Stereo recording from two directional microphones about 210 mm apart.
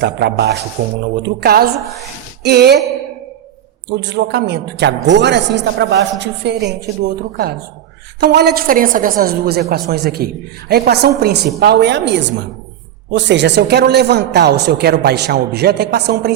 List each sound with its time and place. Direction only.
0.0 s a woman's voice: 55° right (ahead or behind)
3.8 s a man's voice: 55° right (ahead or behind)